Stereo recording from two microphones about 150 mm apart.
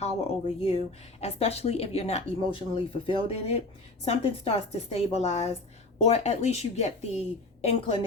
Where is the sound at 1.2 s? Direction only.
45° left (ahead or behind).